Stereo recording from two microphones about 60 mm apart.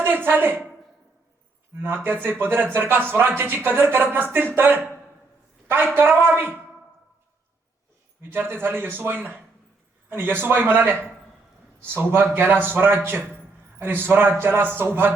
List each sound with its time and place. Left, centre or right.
0.0 s a woman's voice: right
2.0 s speech: right
5.9 s speech: right
8.2 s speech: right